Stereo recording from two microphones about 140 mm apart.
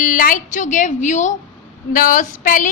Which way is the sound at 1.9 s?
75° left (ahead or behind).